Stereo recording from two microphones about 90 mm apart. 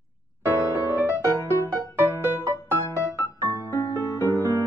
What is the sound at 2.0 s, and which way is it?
Music, 25° right (ahead or behind).